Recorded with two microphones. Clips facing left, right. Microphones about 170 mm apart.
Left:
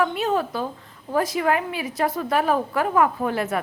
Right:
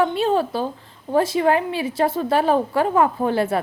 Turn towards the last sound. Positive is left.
turn(degrees=-30)  # may be behind; listen again after turning